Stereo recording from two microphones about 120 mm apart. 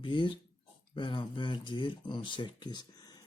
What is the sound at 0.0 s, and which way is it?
Speech, 40° left (ahead or behind).